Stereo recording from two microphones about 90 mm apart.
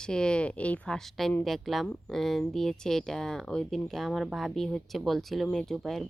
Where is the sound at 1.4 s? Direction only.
Centre (ahead or behind).